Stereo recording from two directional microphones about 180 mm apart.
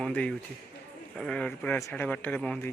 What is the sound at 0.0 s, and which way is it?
Speech, 5° left (ahead or behind).